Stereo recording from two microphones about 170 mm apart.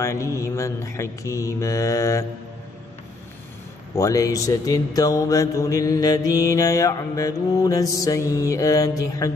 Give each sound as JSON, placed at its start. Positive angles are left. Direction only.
{"t": 0.0, "sound": "mantra", "side_deg": 15}
{"t": 3.9, "sound": "mantra", "side_deg": 20}